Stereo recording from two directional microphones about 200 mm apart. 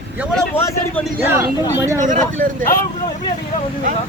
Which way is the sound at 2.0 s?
40° right (ahead or behind).